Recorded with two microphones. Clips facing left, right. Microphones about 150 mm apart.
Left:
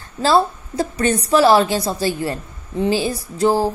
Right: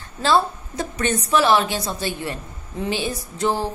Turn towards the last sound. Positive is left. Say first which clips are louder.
# left 6 dB
turn(degrees=35)  # may be behind; listen again after turning